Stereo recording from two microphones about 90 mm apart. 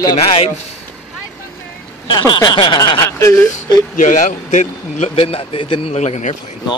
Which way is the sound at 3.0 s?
35° left (ahead or behind).